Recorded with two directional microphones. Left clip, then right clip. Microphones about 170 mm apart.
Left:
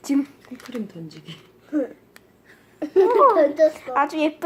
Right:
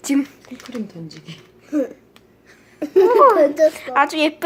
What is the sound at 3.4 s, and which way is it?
Speech, 55° right (ahead or behind).